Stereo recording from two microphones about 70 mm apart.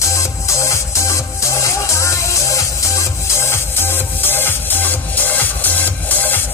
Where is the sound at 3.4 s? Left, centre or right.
Left.